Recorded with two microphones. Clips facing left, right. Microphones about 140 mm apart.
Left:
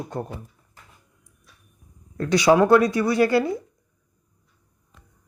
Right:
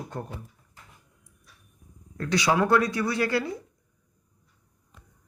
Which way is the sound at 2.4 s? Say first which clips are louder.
Left 7 dB; 25° left (ahead or behind).